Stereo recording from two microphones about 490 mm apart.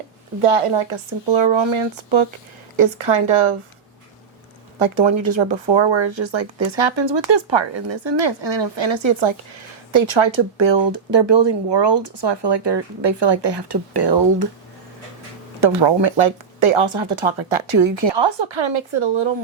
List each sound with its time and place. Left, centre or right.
0.4 s speech: right
3.0 s speech: right
4.8 s speech: right
15.6 s speech: right